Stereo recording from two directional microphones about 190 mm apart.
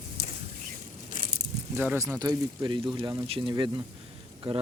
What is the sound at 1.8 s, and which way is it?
Speech, 10° right (ahead or behind).